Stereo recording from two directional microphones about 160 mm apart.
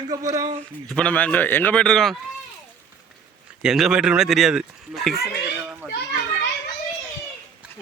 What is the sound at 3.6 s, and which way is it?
Speech, 5° right (ahead or behind).